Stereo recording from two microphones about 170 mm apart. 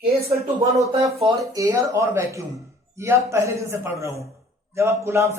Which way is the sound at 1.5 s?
20° right (ahead or behind).